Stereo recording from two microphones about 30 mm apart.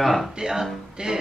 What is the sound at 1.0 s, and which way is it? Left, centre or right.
Music, right.